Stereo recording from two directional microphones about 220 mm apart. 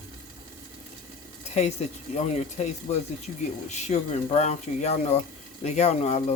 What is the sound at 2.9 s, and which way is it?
Speech, 30° left (ahead or behind).